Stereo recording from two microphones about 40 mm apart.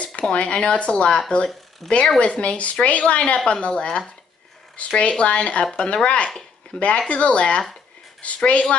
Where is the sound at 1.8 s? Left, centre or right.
Centre.